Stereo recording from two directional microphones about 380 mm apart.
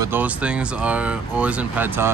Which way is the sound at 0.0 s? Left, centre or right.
Centre.